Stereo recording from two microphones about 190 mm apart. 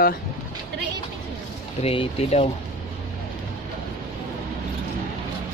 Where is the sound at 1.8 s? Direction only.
30° left (ahead or behind).